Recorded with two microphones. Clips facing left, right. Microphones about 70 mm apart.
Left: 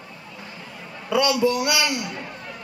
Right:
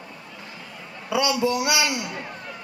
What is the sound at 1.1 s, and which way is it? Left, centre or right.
A man's voice, centre.